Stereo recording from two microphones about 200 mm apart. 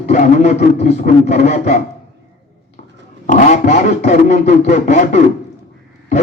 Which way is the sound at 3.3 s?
40° left (ahead or behind).